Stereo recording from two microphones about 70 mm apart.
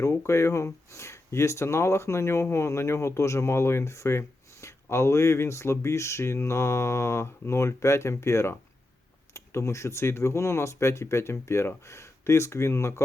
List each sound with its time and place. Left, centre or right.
0.0 s speech: left